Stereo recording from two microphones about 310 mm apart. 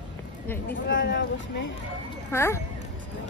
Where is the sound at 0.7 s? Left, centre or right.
Left.